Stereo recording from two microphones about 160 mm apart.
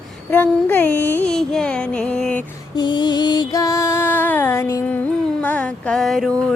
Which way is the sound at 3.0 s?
25° left (ahead or behind).